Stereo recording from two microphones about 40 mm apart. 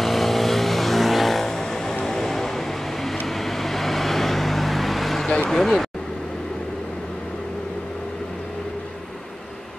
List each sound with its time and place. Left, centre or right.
0.0 s vehicle: centre
5.5 s speech: centre